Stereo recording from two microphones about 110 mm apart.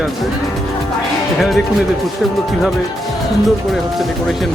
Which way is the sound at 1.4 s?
Centre (ahead or behind).